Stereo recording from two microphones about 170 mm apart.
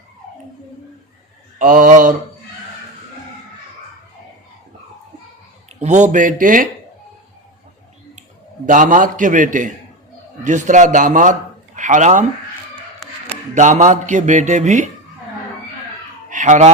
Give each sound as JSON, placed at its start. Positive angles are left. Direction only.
{"t": 1.5, "sound": "speech", "side_deg": -50}
{"t": 5.8, "sound": "speech", "side_deg": -45}
{"t": 8.6, "sound": "a man's voice", "side_deg": -50}
{"t": 13.5, "sound": "speech", "side_deg": -45}
{"t": 16.3, "sound": "speech", "side_deg": -45}